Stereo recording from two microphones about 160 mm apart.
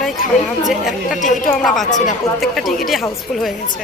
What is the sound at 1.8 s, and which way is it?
Speech, 50° left (ahead or behind).